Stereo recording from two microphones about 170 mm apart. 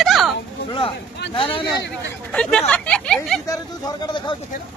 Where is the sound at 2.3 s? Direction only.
5° left (ahead or behind).